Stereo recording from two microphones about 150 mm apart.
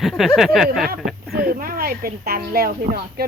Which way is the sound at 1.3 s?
90° right.